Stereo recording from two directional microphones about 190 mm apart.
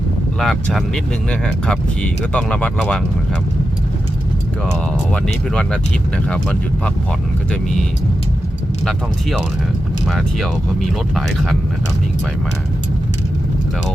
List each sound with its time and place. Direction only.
0.3 s speech: centre (ahead or behind)
5.1 s speech: 5° left (ahead or behind)
10.1 s speech: centre (ahead or behind)